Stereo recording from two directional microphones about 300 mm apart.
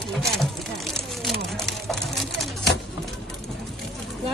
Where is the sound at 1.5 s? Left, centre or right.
Centre.